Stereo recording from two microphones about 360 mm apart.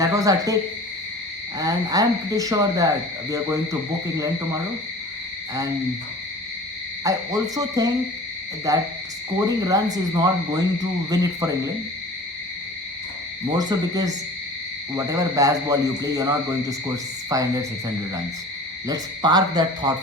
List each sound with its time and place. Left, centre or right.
0.0 s speech: centre
1.5 s speech: centre
7.0 s speech: centre
13.5 s speech: centre